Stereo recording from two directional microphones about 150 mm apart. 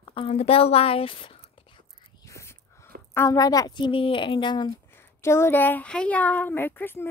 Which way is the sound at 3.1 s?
20° left (ahead or behind).